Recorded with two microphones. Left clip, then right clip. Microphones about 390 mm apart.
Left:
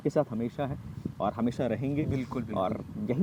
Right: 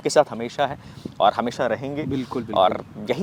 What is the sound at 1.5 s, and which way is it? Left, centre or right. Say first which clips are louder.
Speech: right 7 dB; right.